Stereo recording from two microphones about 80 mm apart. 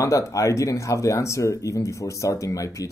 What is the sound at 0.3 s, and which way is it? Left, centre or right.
Speech, left.